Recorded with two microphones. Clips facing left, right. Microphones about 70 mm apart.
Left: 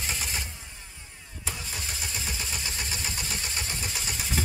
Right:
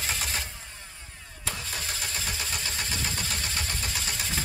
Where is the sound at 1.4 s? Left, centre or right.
Centre.